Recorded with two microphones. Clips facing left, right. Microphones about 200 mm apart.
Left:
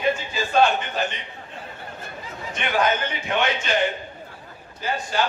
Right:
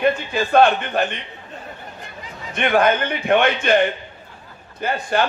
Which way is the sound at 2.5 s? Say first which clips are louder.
Right 6 dB; 55° right (ahead or behind).